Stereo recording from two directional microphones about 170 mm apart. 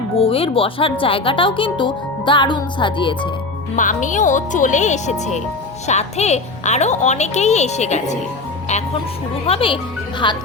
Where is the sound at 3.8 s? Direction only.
50° left (ahead or behind).